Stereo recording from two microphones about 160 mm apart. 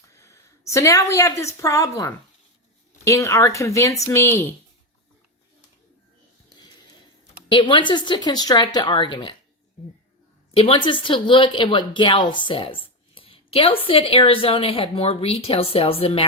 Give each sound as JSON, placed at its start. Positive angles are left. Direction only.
{"t": 0.2, "sound": "speech", "side_deg": 15}
{"t": 7.5, "sound": "speech", "side_deg": 30}
{"t": 10.5, "sound": "speech", "side_deg": 35}